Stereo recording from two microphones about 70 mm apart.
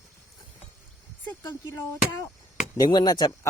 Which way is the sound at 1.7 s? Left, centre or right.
Left.